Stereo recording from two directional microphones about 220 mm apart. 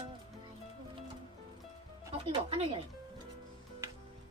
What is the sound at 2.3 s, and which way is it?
Speech, 25° right (ahead or behind).